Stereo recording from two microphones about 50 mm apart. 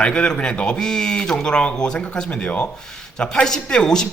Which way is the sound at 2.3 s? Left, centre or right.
Left.